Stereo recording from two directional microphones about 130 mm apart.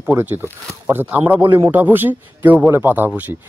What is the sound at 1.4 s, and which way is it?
Speech, 40° right (ahead or behind).